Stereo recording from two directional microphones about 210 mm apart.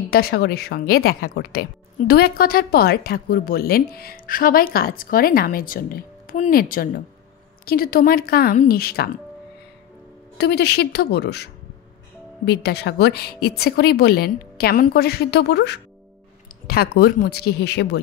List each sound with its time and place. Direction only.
0.1 s speech: 45° left (ahead or behind)
10.3 s speech: 50° left (ahead or behind)